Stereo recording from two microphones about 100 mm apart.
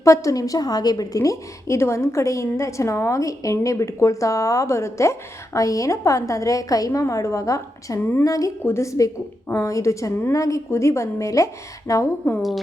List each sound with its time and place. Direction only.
0.0 s a woman's voice: 35° left (ahead or behind)
12.2 s speech: 20° left (ahead or behind)